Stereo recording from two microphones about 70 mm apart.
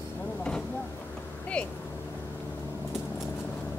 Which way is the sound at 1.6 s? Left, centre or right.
Centre.